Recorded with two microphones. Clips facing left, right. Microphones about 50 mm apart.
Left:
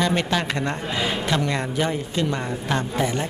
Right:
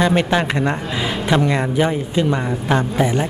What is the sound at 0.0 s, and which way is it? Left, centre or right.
A man's voice, centre.